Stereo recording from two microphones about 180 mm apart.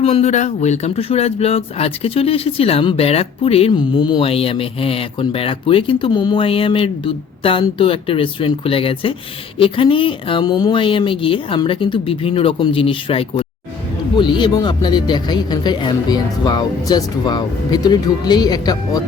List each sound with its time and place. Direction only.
0.0 s speech: 35° left (ahead or behind)